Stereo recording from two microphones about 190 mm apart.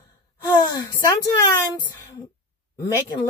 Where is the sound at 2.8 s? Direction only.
20° left (ahead or behind).